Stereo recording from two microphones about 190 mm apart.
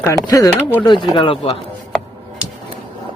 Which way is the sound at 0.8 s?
25° left (ahead or behind).